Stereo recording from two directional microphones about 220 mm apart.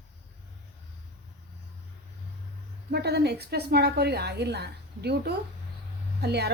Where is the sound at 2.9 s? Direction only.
45° right (ahead or behind).